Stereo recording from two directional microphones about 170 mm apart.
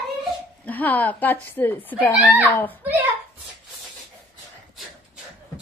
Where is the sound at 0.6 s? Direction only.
10° left (ahead or behind).